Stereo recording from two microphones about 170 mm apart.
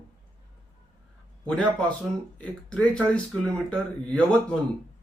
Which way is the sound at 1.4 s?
5° left (ahead or behind).